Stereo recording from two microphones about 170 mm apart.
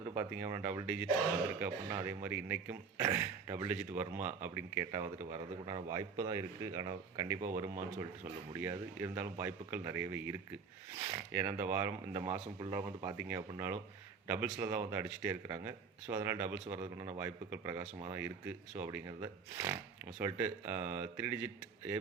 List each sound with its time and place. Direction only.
0.1 s speech: 15° right (ahead or behind)
8.5 s speech: 15° right (ahead or behind)